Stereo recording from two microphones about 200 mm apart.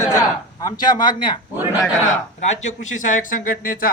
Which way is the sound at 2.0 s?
35° left (ahead or behind).